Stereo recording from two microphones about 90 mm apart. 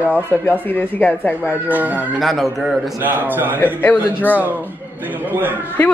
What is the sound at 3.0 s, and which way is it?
Speech, 20° right (ahead or behind).